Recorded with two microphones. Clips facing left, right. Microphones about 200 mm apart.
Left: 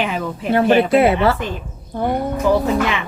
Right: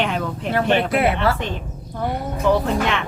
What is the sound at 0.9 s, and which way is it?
Speech, 25° left (ahead or behind).